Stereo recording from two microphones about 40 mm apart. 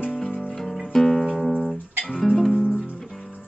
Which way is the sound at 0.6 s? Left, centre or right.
Centre.